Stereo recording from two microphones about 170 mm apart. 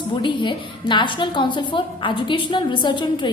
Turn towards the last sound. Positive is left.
turn(degrees=25)  # may be behind; listen again after turning